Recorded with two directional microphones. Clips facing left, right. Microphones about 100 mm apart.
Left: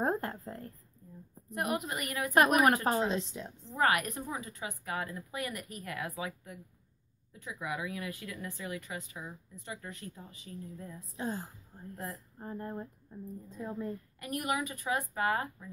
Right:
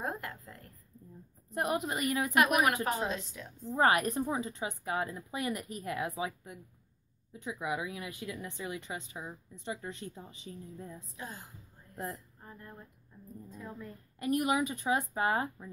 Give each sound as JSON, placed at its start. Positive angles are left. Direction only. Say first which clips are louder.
{"t": 0.0, "sound": "a sound", "louder": "left 6 dB", "side_deg": 35}
{"t": 1.5, "sound": "speech", "louder": "right 2 dB", "side_deg": -25}
{"t": 2.3, "sound": "a woman's voice", "louder": "left 4 dB", "side_deg": 35}
{"t": 3.7, "sound": "speech", "louder": "right 2 dB", "side_deg": -25}
{"t": 11.1, "sound": "speech", "louder": "left 11 dB", "side_deg": 30}
{"t": 11.9, "sound": "speech", "louder": "right 2 dB", "side_deg": -30}
{"t": 12.4, "sound": "a woman's voice", "louder": "left 10 dB", "side_deg": 35}
{"t": 14.2, "sound": "speech", "louder": "right 5 dB", "side_deg": -25}